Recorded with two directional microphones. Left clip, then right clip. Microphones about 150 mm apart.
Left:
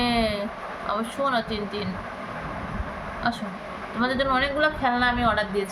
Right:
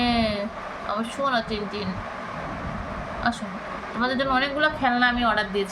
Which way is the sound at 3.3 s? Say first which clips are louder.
Right 1 dB; 5° right (ahead or behind).